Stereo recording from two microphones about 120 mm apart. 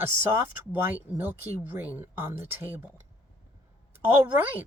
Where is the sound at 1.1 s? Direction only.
15° right (ahead or behind).